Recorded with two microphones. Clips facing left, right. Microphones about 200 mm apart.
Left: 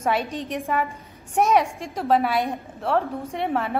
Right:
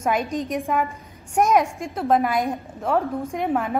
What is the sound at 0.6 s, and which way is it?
Speech, centre (ahead or behind).